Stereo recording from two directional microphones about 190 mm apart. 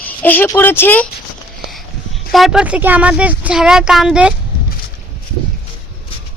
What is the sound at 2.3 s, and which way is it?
Speech, centre (ahead or behind).